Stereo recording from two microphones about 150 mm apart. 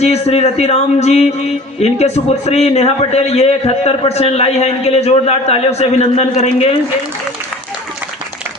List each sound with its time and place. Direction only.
0.0 s a man's voice: 45° left (ahead or behind)